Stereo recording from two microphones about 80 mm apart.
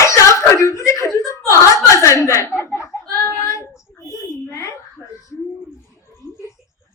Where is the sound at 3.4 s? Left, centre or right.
Left.